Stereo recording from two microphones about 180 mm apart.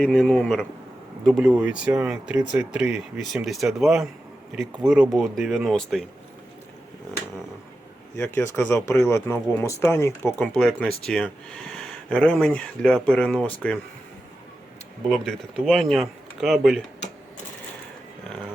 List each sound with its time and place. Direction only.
0.0 s speech: 5° left (ahead or behind)
8.1 s speech: 15° left (ahead or behind)
15.1 s speech: centre (ahead or behind)